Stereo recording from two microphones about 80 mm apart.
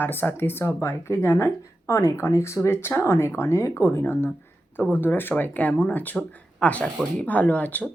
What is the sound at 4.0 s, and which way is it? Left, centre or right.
Speech, left.